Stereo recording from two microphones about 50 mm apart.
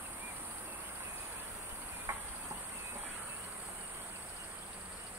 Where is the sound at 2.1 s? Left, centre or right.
Right.